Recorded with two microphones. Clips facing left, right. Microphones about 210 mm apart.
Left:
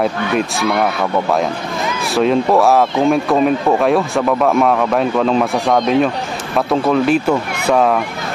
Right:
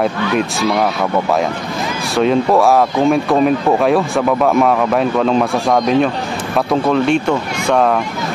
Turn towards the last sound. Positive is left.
turn(degrees=5)  # may be behind; listen again after turning